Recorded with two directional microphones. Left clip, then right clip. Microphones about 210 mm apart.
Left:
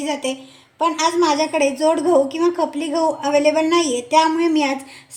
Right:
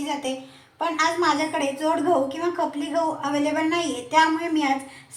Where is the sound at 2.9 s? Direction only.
50° left (ahead or behind).